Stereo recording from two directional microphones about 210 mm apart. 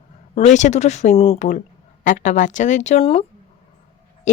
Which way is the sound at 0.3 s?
35° left (ahead or behind).